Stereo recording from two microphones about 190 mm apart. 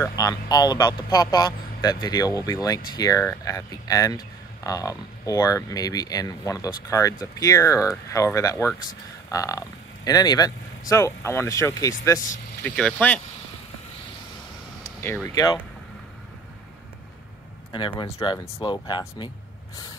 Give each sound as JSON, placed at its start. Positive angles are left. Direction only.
{"t": 0.0, "sound": "speech", "side_deg": 20}
{"t": 12.6, "sound": "speech", "side_deg": 5}
{"t": 14.8, "sound": "speech", "side_deg": 10}
{"t": 17.7, "sound": "speech", "side_deg": 25}